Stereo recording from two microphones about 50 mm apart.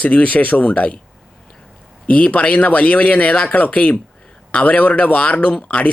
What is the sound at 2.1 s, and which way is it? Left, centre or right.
Speech, left.